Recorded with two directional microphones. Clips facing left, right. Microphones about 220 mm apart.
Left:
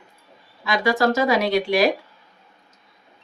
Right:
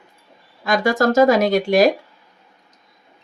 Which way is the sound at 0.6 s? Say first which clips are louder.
Right 3 dB; 45° right (ahead or behind).